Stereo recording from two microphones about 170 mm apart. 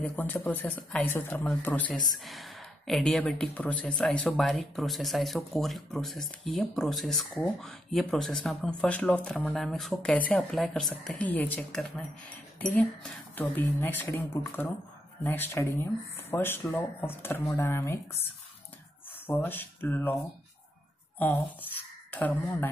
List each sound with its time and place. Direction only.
0.0 s speech: 10° left (ahead or behind)
19.2 s speech: 10° left (ahead or behind)
21.2 s speech: 10° left (ahead or behind)